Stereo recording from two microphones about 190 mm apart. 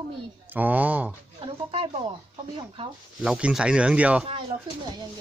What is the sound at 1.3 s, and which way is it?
Speech, 30° right (ahead or behind).